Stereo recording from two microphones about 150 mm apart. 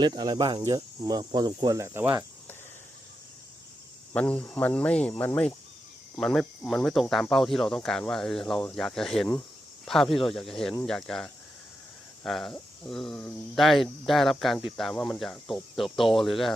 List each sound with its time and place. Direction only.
0.0 s speech: 30° right (ahead or behind)
4.1 s speech: 10° left (ahead or behind)